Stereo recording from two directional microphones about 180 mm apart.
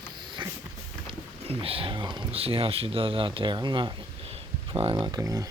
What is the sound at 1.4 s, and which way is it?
Speech, 30° right (ahead or behind).